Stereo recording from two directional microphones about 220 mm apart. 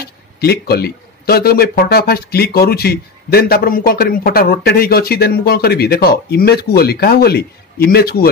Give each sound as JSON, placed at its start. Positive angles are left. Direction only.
{"t": 0.0, "sound": "speech", "side_deg": 45}